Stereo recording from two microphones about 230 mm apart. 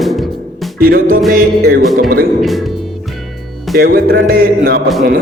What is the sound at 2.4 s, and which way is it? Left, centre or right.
Music, centre.